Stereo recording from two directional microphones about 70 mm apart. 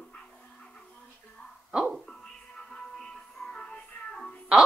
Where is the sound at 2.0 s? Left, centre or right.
Centre.